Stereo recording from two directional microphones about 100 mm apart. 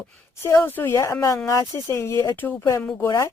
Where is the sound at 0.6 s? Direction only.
20° left (ahead or behind).